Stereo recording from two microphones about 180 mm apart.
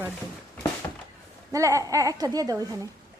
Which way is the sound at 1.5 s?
15° right (ahead or behind).